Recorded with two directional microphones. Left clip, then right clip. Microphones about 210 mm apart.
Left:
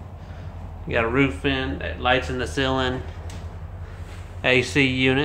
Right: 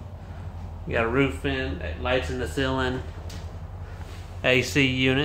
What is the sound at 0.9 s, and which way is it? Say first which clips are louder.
Speech: left 2 dB; 5° left (ahead or behind).